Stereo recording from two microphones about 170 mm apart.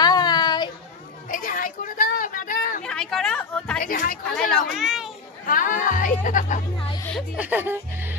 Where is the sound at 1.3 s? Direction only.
55° left (ahead or behind).